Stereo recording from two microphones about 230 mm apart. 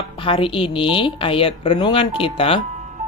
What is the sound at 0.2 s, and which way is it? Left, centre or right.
Speech, left.